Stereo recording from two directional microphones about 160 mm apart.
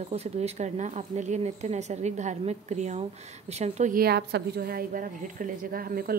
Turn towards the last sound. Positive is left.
turn(degrees=-65)  # may be behind; listen again after turning